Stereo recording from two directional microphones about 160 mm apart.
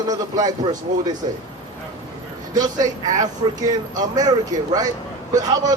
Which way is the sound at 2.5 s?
25° right (ahead or behind).